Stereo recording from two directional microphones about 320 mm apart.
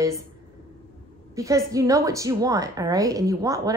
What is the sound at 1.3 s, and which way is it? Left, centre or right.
A woman's voice, centre.